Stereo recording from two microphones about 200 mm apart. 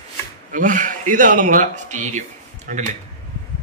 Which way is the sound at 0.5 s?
40° right (ahead or behind).